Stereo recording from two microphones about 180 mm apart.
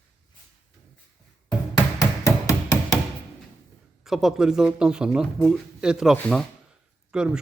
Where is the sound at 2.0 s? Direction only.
15° left (ahead or behind).